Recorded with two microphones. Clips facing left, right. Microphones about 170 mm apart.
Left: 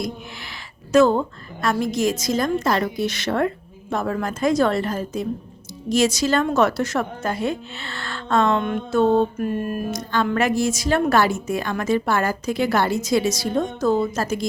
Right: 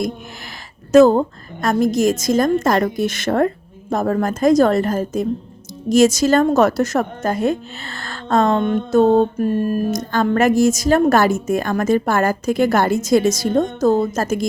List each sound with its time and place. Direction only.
0.9 s a woman's voice: 40° right (ahead or behind)